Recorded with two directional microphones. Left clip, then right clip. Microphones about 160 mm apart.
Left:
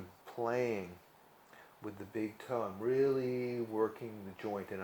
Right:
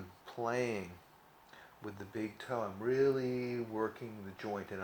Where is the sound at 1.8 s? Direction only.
45° left (ahead or behind).